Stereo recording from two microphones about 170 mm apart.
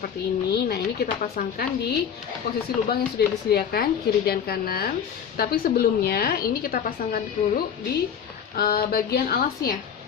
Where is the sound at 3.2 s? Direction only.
70° left (ahead or behind).